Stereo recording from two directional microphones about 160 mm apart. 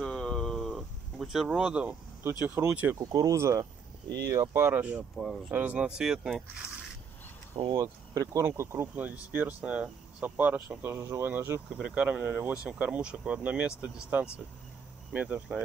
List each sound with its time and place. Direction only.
0.0 s a sound: 5° left (ahead or behind)
2.4 s speech: 10° right (ahead or behind)
3.0 s speech: 20° right (ahead or behind); by 6.4 s 5° right (ahead or behind)
7.5 s speech: 25° right (ahead or behind); by 15.6 s 10° right (ahead or behind)